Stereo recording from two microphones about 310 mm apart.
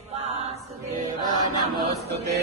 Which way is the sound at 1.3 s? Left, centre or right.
Centre.